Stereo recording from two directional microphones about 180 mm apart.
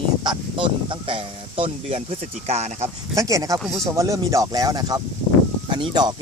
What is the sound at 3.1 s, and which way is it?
Speech, 20° right (ahead or behind).